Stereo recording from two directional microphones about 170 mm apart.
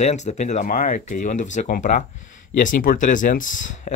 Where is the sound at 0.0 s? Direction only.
40° left (ahead or behind).